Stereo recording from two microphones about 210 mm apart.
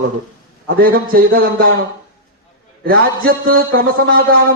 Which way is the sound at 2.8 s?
45° right (ahead or behind).